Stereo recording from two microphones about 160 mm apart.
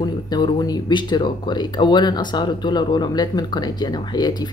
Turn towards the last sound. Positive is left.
turn(degrees=25)  # may be behind; listen again after turning